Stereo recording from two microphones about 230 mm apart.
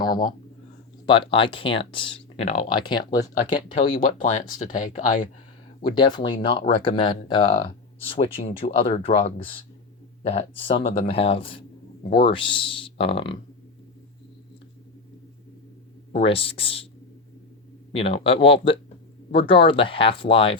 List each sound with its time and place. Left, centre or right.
0.0 s a sound: centre
1.0 s speech: left
3.9 s speech: left
5.9 s speech: centre
16.2 s speech: left
17.9 s speech: left